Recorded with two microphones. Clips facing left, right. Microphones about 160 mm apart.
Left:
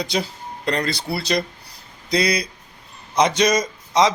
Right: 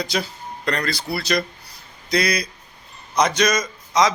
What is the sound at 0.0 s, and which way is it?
A man's voice, 25° left (ahead or behind).